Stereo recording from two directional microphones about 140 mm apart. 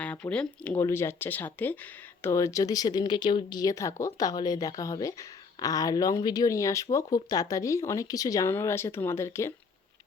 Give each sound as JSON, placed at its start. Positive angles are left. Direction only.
{"t": 0.0, "sound": "speech", "side_deg": 10}